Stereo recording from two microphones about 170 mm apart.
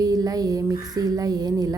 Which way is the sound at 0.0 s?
20° right (ahead or behind).